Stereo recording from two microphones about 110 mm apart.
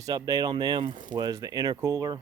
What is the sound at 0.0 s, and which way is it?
Speech, 35° right (ahead or behind).